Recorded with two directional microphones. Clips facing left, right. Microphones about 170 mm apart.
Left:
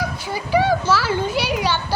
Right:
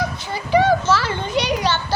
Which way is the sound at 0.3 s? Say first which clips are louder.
Right 2 dB; 10° left (ahead or behind).